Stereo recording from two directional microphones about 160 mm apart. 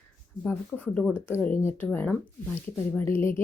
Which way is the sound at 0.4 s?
10° left (ahead or behind).